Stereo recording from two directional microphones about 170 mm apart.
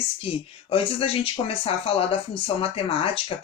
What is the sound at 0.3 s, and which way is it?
Speech, 35° left (ahead or behind).